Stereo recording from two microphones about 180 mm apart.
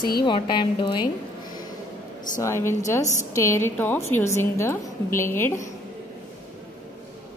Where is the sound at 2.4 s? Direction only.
15° left (ahead or behind).